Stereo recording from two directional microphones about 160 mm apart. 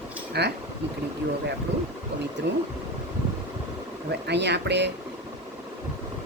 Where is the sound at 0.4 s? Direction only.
90° right.